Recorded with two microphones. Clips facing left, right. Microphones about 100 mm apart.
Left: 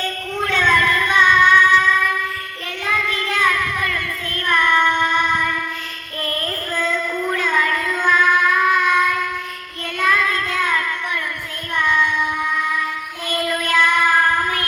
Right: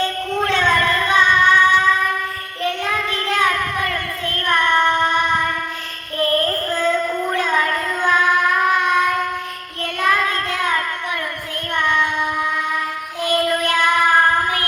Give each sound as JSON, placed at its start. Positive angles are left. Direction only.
{"t": 0.4, "sound": "child singing", "side_deg": -30}
{"t": 2.6, "sound": "child singing", "side_deg": -40}
{"t": 13.2, "sound": "child singing", "side_deg": -35}